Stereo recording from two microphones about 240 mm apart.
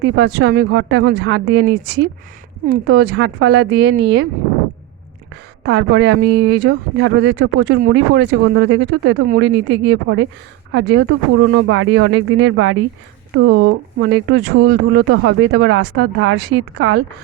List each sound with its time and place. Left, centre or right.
0.0 s speech: right
5.6 s speech: right